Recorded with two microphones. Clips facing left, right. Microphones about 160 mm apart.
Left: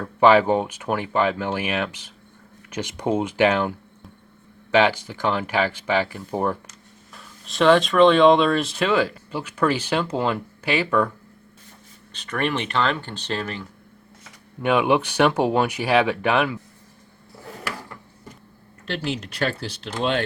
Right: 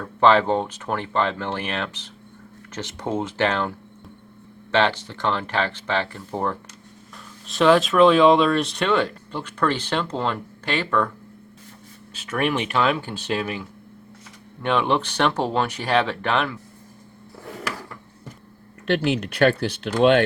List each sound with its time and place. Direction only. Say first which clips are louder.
0.0 s speech: left 2 dB; 10° left (ahead or behind)
7.4 s speech: even; centre (ahead or behind)
12.1 s speech: right 1 dB; 5° right (ahead or behind)
14.6 s speech: left 2 dB; 10° left (ahead or behind)
18.9 s speech: right 6 dB; 60° right (ahead or behind)